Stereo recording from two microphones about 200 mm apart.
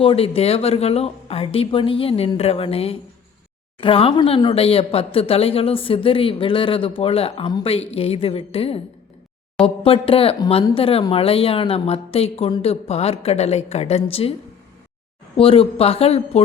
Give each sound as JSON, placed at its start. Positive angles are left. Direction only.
{"t": 0.0, "sound": "speech", "side_deg": 30}
{"t": 15.4, "sound": "speech", "side_deg": 30}